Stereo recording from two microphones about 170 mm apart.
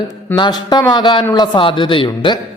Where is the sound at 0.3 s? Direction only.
25° left (ahead or behind).